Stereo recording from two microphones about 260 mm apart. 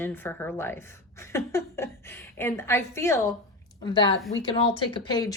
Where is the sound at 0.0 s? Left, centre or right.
Centre.